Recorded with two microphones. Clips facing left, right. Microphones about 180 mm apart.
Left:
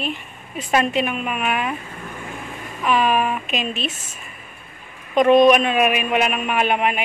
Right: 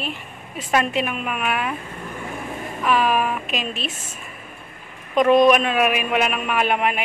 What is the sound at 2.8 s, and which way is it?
A woman's voice, 5° right (ahead or behind).